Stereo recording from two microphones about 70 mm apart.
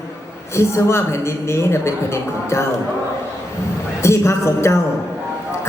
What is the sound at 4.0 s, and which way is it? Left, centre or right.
Speech, left.